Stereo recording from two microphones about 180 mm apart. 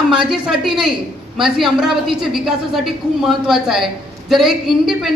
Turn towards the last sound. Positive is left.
turn(degrees=0)  # may be behind; listen again after turning